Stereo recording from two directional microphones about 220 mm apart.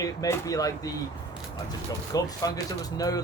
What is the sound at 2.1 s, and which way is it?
Speech, 15° left (ahead or behind).